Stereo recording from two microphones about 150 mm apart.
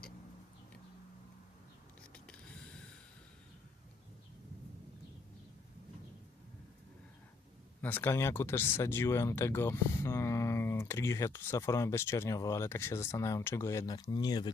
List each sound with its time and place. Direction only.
7.8 s speech: 10° left (ahead or behind); by 14.5 s 25° left (ahead or behind)